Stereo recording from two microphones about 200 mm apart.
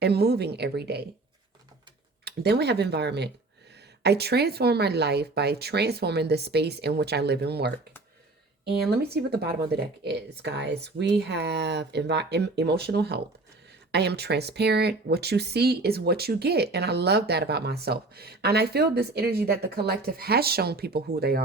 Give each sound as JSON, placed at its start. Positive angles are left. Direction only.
{"t": 0.0, "sound": "speech", "side_deg": -55}
{"t": 2.2, "sound": "speech", "side_deg": -55}
{"t": 9.1, "sound": "speech", "side_deg": -50}